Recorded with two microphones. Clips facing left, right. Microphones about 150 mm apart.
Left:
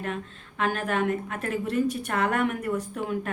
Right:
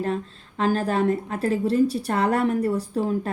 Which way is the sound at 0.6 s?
35° right (ahead or behind).